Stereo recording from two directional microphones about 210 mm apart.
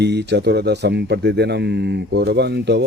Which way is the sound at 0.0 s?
55° right (ahead or behind).